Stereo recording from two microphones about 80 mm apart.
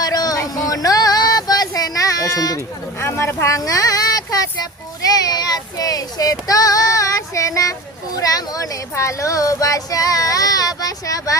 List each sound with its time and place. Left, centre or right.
0.0 s a sound: left
0.3 s child singing: left
3.0 s speech: left
5.0 s child singing: left